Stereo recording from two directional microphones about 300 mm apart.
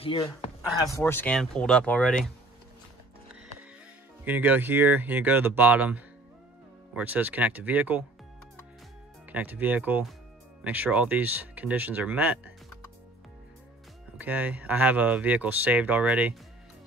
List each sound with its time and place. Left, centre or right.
0.0 s speech: centre
4.2 s speech: centre
9.3 s speech: centre
14.1 s speech: centre